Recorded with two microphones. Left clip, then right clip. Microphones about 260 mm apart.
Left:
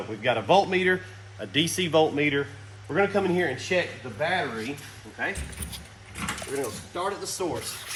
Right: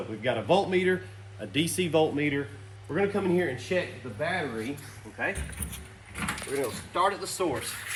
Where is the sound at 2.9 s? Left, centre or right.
Left.